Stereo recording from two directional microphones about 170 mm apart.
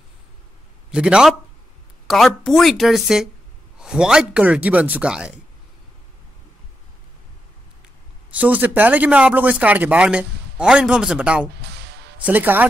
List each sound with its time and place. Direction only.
0.9 s a man's voice: 5° right (ahead or behind)
8.3 s speech: 10° right (ahead or behind)
11.6 s music: 75° right (ahead or behind)
12.3 s speech: 10° right (ahead or behind)